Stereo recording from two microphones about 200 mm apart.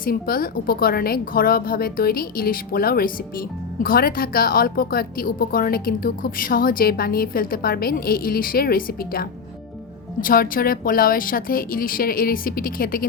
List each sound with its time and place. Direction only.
0.0 s speech: 45° left (ahead or behind)